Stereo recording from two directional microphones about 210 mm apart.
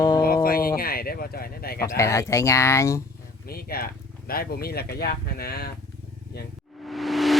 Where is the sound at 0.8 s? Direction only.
45° left (ahead or behind).